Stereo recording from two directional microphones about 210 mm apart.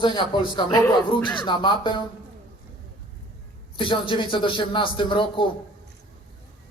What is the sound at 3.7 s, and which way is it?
Speech, 25° left (ahead or behind).